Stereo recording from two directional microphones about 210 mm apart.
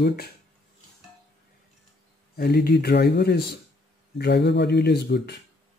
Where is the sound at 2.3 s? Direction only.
50° left (ahead or behind).